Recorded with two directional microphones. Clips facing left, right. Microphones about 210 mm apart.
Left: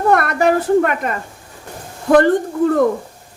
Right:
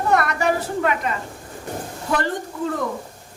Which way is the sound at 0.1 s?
55° left (ahead or behind).